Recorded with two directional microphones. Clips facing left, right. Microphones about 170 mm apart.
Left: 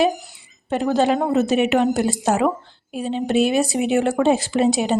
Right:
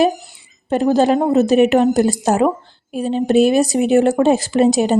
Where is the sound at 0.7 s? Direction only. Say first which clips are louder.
Right 4 dB; 40° right (ahead or behind).